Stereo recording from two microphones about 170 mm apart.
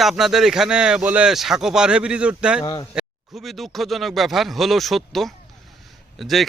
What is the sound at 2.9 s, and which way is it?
Speech, centre (ahead or behind).